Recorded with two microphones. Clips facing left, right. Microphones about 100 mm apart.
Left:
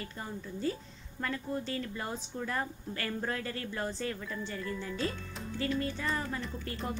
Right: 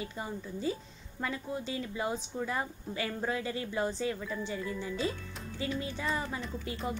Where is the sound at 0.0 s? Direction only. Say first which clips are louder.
Right 3 dB; 10° right (ahead or behind).